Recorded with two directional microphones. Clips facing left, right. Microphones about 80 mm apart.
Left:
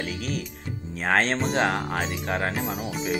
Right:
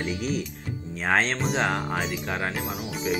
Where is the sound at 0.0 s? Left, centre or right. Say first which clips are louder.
Right 2 dB; centre.